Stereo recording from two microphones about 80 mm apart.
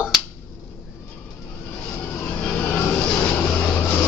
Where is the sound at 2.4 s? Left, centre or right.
Centre.